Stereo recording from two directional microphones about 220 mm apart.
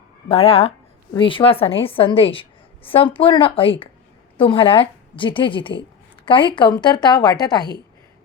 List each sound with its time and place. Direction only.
0.3 s a woman's voice: 25° left (ahead or behind)